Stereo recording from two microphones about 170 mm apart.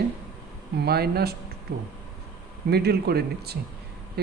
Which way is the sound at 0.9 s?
70° right (ahead or behind).